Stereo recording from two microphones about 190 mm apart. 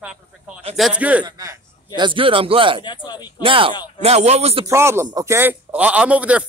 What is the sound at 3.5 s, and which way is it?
Speech, 25° right (ahead or behind).